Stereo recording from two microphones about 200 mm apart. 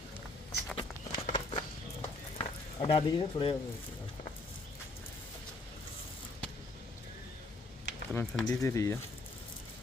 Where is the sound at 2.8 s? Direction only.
25° left (ahead or behind).